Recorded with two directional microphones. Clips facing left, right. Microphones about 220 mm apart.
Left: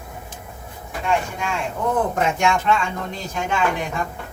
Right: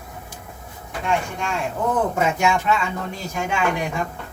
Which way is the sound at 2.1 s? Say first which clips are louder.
Even; 5° right (ahead or behind).